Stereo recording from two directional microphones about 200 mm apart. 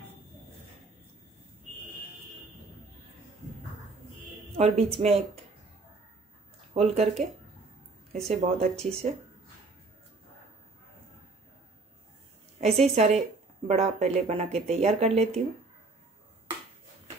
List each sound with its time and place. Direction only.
4.6 s speech: 30° right (ahead or behind)
6.7 s speech: 30° right (ahead or behind)
8.3 s speech: 30° right (ahead or behind)
12.8 s speech: 30° right (ahead or behind)